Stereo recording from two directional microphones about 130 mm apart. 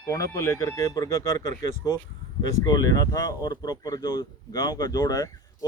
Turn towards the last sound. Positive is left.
turn(degrees=30)  # may be behind; listen again after turning